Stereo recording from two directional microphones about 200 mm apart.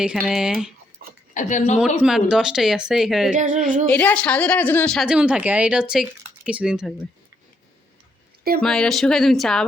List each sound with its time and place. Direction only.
0.0 s a woman's voice: 5° right (ahead or behind)
1.3 s a woman's voice: 40° left (ahead or behind)
2.0 s a woman's voice: 5° right (ahead or behind)
3.3 s speech: 40° right (ahead or behind)
3.8 s a woman's voice: 5° left (ahead or behind)
8.6 s a woman's voice: 5° left (ahead or behind)